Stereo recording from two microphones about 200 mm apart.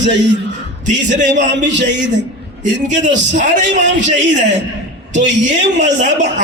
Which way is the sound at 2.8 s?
40° right (ahead or behind).